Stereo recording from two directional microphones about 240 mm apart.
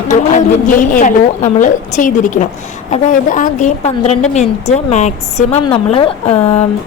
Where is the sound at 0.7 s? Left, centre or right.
Left.